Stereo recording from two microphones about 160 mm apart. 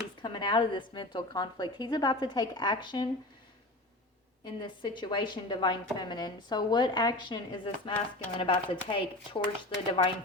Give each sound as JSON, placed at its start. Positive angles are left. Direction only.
{"t": 0.2, "sound": "speech", "side_deg": 30}
{"t": 4.4, "sound": "speech", "side_deg": 30}